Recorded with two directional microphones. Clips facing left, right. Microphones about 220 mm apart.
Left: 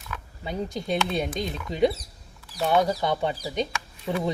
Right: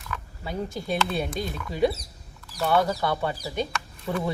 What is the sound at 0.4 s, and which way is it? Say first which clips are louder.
Speech: left 1 dB; 20° left (ahead or behind).